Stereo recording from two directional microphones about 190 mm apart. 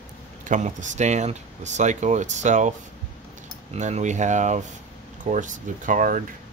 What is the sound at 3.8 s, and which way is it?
Speech, 40° right (ahead or behind).